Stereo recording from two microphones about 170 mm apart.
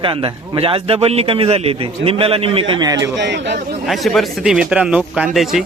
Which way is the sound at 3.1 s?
90° right.